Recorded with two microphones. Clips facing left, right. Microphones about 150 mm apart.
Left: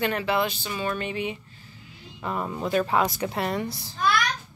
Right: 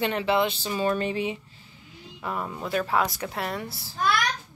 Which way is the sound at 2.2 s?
10° right (ahead or behind).